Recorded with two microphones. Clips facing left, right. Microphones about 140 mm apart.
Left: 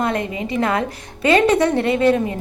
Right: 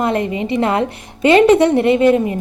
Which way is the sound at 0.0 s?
30° right (ahead or behind).